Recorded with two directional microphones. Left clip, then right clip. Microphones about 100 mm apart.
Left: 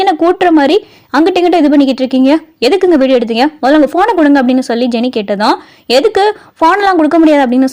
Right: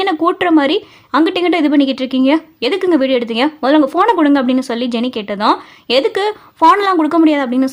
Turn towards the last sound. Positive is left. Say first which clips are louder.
# left 6 dB
turn(degrees=50)  # may be behind; listen again after turning